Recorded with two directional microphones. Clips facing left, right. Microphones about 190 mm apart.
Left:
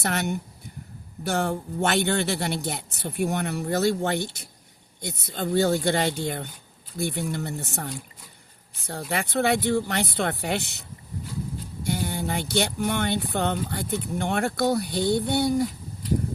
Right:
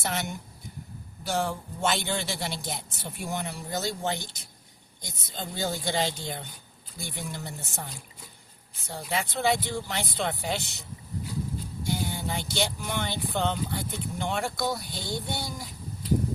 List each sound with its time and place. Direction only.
0.0 s speech: 65° left (ahead or behind)
8.9 s speech: 60° left (ahead or behind)
11.9 s speech: 60° left (ahead or behind)